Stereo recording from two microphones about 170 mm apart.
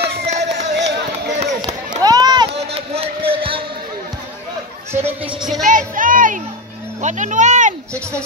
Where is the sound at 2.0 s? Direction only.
25° right (ahead or behind).